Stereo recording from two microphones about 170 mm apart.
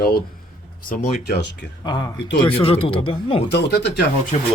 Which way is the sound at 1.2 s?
75° left (ahead or behind).